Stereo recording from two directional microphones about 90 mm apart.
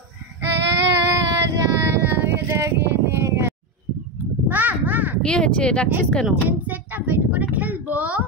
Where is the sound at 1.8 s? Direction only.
25° right (ahead or behind).